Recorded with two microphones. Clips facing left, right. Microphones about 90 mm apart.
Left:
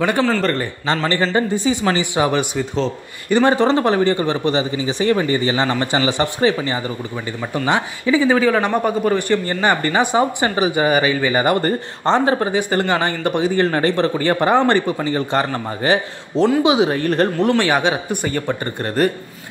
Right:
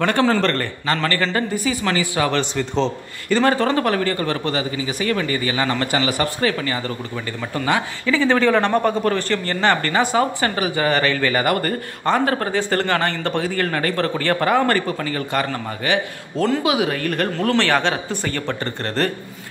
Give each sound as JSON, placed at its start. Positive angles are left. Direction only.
{"t": 0.4, "sound": "speech", "side_deg": 10}
{"t": 1.0, "sound": "a man's voice", "side_deg": 20}
{"t": 17.5, "sound": "speech", "side_deg": 15}